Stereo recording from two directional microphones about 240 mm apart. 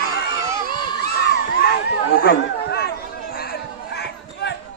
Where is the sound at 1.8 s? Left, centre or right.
Left.